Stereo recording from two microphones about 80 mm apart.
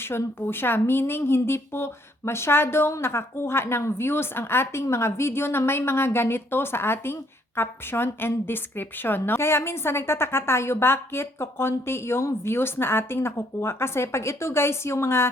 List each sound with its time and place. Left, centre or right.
0.0 s speech: left